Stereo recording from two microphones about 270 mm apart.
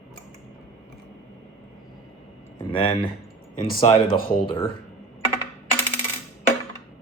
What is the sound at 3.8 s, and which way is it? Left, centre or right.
Speech, centre.